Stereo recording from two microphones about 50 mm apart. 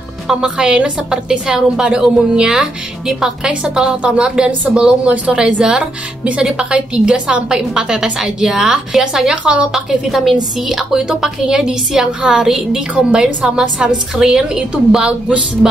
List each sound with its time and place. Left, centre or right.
0.3 s a woman's voice: centre
9.3 s a woman's voice: right
9.7 s a woman's voice: centre